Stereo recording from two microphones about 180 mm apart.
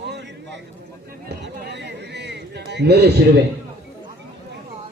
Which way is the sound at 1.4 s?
70° right (ahead or behind).